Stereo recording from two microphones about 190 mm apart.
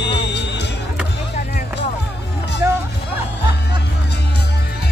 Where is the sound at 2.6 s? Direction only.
10° right (ahead or behind).